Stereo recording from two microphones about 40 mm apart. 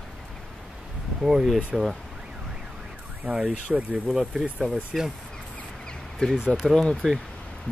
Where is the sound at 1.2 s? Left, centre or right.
Centre.